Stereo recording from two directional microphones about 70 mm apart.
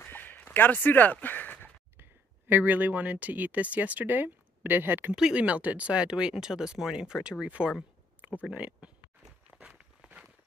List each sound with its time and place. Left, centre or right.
0.0 s a sound: left
2.0 s speech: right
5.1 s speech: centre
7.4 s speech: right
9.5 s walk: centre